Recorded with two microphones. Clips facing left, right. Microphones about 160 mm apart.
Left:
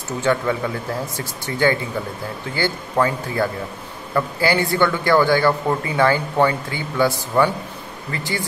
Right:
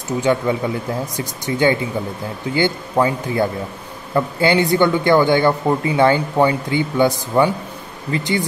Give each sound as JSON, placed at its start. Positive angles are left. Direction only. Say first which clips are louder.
{"t": 0.2, "sound": "speech", "louder": "right 2 dB", "side_deg": -15}